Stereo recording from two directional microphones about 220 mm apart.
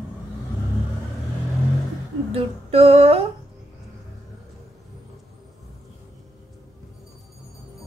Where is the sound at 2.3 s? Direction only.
25° right (ahead or behind).